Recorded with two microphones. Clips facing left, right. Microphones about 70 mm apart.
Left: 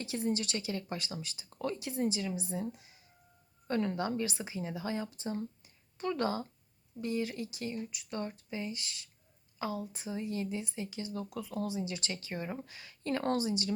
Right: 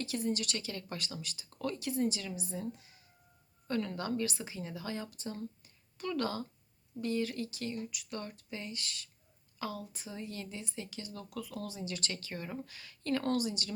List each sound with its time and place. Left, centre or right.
0.0 s speech: left